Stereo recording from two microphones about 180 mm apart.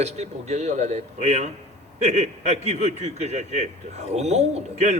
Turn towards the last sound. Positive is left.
turn(degrees=-35)  # may be behind; listen again after turning